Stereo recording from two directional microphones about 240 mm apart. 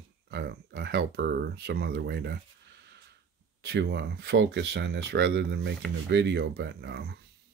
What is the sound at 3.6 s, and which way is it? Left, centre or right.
Speech, right.